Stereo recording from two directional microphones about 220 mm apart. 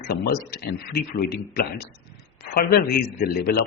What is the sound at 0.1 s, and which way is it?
Speech, 45° left (ahead or behind).